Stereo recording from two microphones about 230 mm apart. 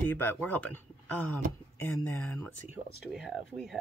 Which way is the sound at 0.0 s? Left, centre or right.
Centre.